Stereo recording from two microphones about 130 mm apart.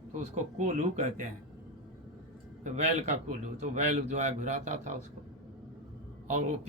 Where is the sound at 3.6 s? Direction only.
65° right (ahead or behind).